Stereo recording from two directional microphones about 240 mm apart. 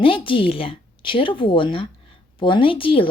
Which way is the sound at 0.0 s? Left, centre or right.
Left.